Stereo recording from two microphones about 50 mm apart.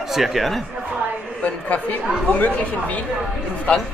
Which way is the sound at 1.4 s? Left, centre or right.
Left.